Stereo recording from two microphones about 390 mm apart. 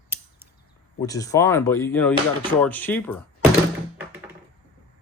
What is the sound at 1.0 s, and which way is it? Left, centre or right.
Speech, centre.